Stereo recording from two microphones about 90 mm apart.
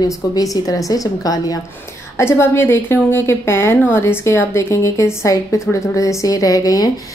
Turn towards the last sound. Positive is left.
turn(degrees=45)  # may be behind; listen again after turning